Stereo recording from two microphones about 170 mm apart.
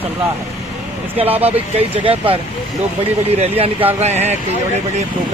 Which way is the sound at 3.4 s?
35° right (ahead or behind).